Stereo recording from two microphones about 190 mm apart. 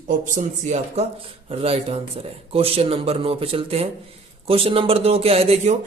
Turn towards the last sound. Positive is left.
turn(degrees=-30)  # may be behind; listen again after turning